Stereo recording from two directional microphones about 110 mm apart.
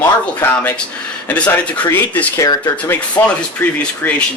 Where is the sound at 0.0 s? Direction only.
15° left (ahead or behind).